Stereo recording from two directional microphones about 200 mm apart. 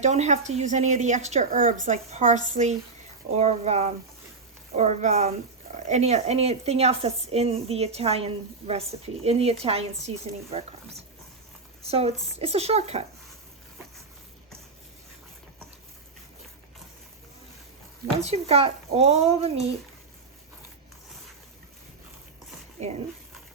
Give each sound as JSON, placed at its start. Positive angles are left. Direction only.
{"t": 0.0, "sound": "a woman's voice", "side_deg": -35}
{"t": 10.5, "sound": "a sound", "side_deg": -30}
{"t": 11.8, "sound": "a woman's voice", "side_deg": -30}
{"t": 18.2, "sound": "a woman's voice", "side_deg": -30}